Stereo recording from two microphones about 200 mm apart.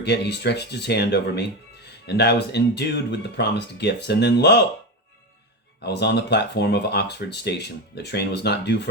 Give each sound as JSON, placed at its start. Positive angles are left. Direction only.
{"t": 0.0, "sound": "speech", "side_deg": 55}
{"t": 5.8, "sound": "speech", "side_deg": 55}